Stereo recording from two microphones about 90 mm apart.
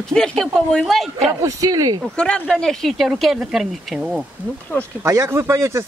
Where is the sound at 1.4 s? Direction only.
40° right (ahead or behind).